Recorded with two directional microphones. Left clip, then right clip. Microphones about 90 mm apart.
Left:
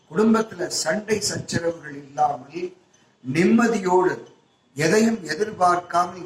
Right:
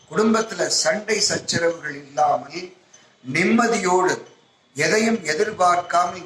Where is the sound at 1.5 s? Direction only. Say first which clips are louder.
Right 4 dB; 30° right (ahead or behind).